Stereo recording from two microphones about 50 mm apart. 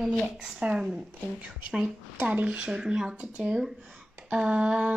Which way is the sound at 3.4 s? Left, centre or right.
Centre.